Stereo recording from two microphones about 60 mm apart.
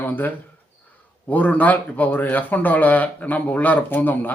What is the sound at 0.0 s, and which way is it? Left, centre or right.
Speech, left.